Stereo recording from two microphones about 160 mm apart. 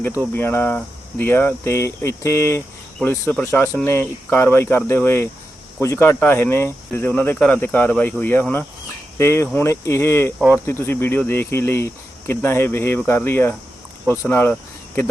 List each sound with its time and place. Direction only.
0.0 s speech: 10° left (ahead or behind)